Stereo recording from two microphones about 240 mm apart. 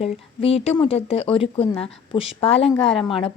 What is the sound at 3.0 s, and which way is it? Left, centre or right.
Speech, left.